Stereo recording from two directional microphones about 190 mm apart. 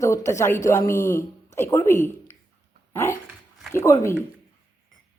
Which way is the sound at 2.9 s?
15° left (ahead or behind).